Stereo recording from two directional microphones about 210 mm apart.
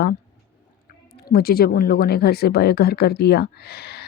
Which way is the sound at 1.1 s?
45° left (ahead or behind).